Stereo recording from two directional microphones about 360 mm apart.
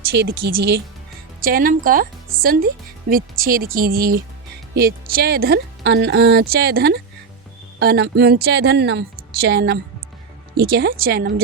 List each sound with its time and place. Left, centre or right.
0.1 s speech: right